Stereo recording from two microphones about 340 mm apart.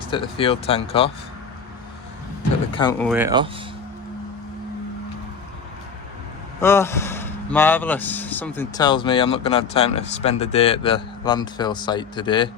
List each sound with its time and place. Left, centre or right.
0.1 s speech: centre
2.7 s speech: centre
3.1 s speech: centre
6.6 s speech: centre